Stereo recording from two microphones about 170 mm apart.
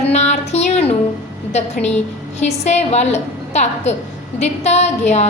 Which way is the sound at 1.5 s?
40° left (ahead or behind).